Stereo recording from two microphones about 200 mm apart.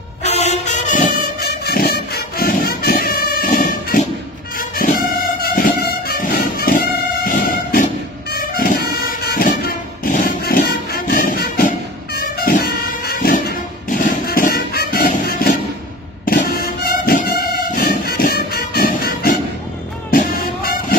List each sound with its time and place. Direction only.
0.2 s music: 35° left (ahead or behind)
1.6 s music: 50° left (ahead or behind)